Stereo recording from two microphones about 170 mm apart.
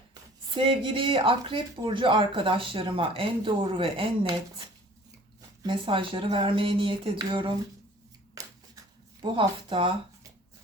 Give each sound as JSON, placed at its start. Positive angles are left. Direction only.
{"t": 0.5, "sound": "speech", "side_deg": -30}
{"t": 5.6, "sound": "speech", "side_deg": -30}
{"t": 9.2, "sound": "speech", "side_deg": -30}